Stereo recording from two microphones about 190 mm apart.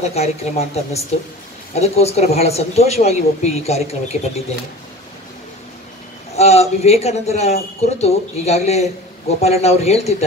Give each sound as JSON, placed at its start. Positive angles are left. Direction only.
{"t": 0.0, "sound": "speech", "side_deg": 35}
{"t": 6.3, "sound": "speech", "side_deg": 35}